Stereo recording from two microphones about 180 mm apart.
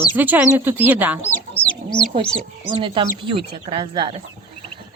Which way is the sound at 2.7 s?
30° right (ahead or behind).